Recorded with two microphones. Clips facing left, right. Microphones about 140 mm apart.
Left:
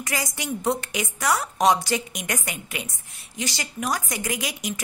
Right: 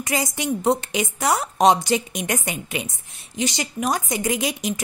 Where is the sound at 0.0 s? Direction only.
20° right (ahead or behind).